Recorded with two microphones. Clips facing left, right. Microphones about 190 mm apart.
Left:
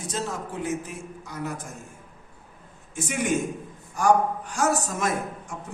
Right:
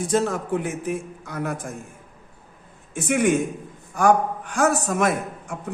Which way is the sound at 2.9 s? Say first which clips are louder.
Right 6 dB; 60° right (ahead or behind).